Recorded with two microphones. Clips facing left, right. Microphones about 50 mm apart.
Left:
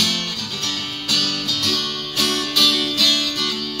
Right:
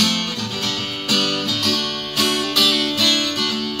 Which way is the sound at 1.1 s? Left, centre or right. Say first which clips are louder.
Right 3 dB; right.